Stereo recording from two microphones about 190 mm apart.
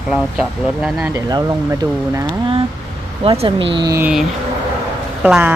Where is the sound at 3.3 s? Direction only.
25° right (ahead or behind).